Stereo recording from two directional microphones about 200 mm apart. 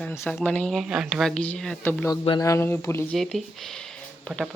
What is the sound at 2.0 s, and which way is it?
Speech, 20° left (ahead or behind).